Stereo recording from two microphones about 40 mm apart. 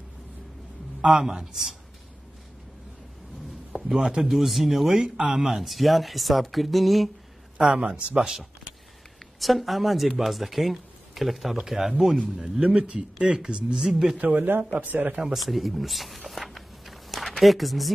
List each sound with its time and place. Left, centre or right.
1.1 s speech: centre
3.7 s a man's voice: centre
4.3 s speech: centre
4.9 s speech: right
5.5 s speech: centre
7.8 s speech: right
9.4 s speech: centre
12.5 s speech: right
13.7 s speech: centre
14.2 s speech: right
15.3 s walk: centre
17.4 s speech: centre